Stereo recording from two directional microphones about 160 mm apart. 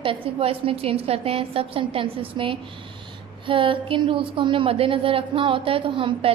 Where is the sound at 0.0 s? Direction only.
35° right (ahead or behind).